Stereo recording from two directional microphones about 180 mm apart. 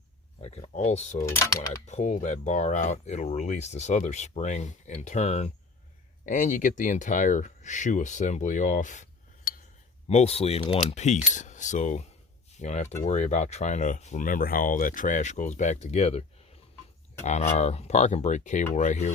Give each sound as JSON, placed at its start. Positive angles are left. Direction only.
{"t": 0.4, "sound": "speech", "side_deg": 35}
{"t": 1.2, "sound": "speech", "side_deg": 15}
{"t": 1.9, "sound": "speech", "side_deg": 40}
{"t": 17.2, "sound": "speech", "side_deg": 40}